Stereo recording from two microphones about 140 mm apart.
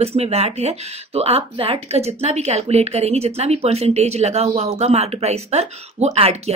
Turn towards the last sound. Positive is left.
turn(degrees=-50)  # may be behind; listen again after turning